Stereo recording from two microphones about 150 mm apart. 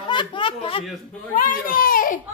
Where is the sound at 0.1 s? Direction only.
35° left (ahead or behind).